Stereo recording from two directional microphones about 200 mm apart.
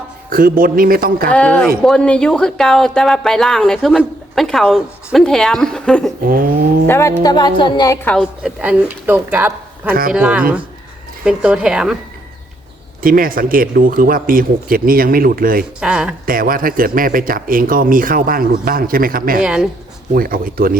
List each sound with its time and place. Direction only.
0.3 s speech: 45° right (ahead or behind)
1.3 s speech: 5° left (ahead or behind)
6.2 s speech: 45° right (ahead or behind)
6.8 s speech: 10° left (ahead or behind)
8.0 s a woman's voice: centre (ahead or behind)
13.0 s speech: 45° right (ahead or behind)
15.8 s speech: 5° right (ahead or behind)
16.2 s speech: 45° right (ahead or behind)
19.4 s speech: 5° right (ahead or behind)
20.1 s speech: 45° right (ahead or behind)